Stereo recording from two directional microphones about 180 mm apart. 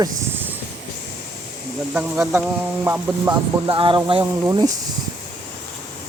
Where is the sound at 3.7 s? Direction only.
30° right (ahead or behind).